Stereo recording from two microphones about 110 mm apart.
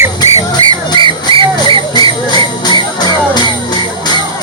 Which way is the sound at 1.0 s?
50° right (ahead or behind).